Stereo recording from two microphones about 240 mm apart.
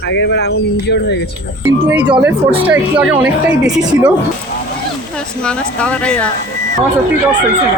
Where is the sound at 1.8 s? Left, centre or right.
Centre.